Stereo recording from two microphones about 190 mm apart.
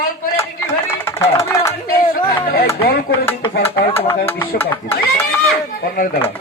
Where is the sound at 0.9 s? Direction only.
15° left (ahead or behind).